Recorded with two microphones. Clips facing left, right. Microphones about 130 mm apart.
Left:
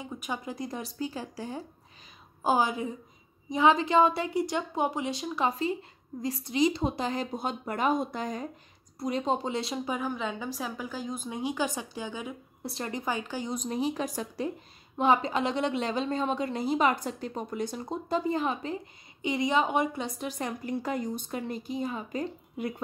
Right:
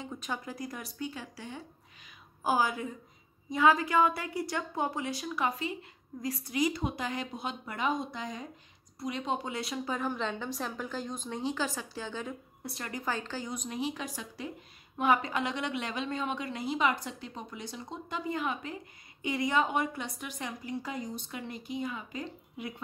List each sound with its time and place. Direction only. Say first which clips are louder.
0.0 s speech: left 2 dB; 15° left (ahead or behind); by 1.6 s 35° left (ahead or behind)
2.4 s a woman's voice: left 3 dB; 20° left (ahead or behind); by 8.5 s 50° left (ahead or behind)
9.0 s a woman's voice: left 5 dB; 35° left (ahead or behind)
9.8 s a woman's voice: left 1 dB; 5° left (ahead or behind)
12.6 s speech: left 4 dB; 25° left (ahead or behind)
13.5 s a woman's voice: left 6 dB; 35° left (ahead or behind)
15.0 s a woman's voice: left 3 dB; 25° left (ahead or behind)
19.2 s speech: left 3 dB; 20° left (ahead or behind)
20.2 s speech: left 6 dB; 40° left (ahead or behind)